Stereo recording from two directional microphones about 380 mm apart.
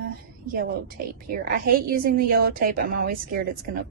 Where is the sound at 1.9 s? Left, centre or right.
Right.